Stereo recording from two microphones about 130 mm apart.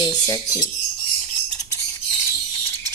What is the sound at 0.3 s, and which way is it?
Speech, 30° left (ahead or behind).